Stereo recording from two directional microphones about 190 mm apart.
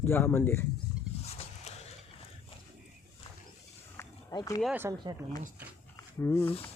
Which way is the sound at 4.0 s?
20° left (ahead or behind).